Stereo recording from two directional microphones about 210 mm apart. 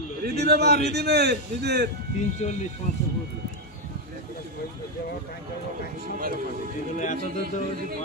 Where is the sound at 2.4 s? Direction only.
30° left (ahead or behind).